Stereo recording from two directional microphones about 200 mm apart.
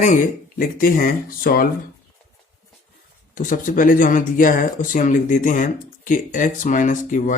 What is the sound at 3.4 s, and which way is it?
Speech, 40° left (ahead or behind).